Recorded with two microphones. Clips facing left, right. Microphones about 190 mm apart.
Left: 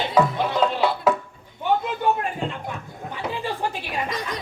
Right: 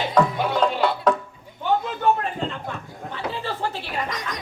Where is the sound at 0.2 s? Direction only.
5° left (ahead or behind).